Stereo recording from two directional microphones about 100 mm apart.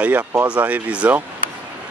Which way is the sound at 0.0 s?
15° right (ahead or behind).